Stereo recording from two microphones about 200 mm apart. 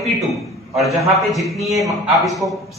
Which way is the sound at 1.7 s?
15° right (ahead or behind).